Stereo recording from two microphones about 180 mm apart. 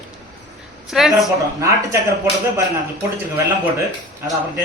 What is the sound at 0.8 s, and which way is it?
Speech, centre (ahead or behind).